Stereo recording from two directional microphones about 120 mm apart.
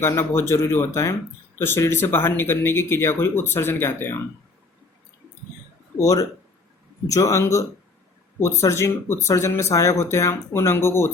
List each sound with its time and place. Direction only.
0.0 s speech: 20° left (ahead or behind)
6.0 s speech: 30° left (ahead or behind)